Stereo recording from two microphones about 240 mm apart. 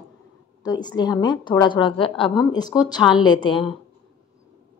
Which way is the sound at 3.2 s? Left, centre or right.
Centre.